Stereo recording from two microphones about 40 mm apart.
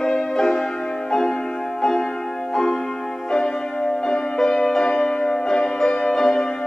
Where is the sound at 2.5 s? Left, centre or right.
Centre.